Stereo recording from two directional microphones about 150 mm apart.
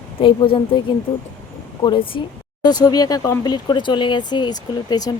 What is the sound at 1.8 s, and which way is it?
A woman's voice, 35° left (ahead or behind).